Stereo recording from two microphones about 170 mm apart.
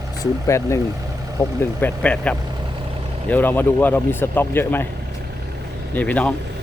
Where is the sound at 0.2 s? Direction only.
15° left (ahead or behind).